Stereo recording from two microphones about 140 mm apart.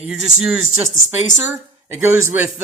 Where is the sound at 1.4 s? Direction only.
15° right (ahead or behind).